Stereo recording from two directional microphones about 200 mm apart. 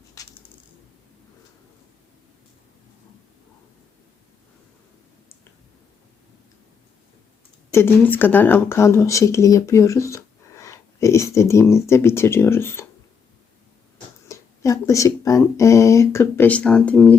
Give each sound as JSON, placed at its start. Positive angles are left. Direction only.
{"t": 0.2, "sound": "coin", "side_deg": 15}
{"t": 7.7, "sound": "speech", "side_deg": 10}
{"t": 14.3, "sound": "speech", "side_deg": 15}